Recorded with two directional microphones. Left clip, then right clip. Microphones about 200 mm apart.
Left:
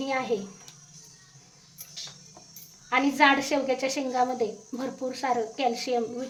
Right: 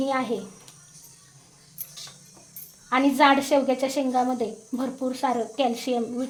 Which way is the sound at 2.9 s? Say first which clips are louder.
Right 2 dB; 20° right (ahead or behind).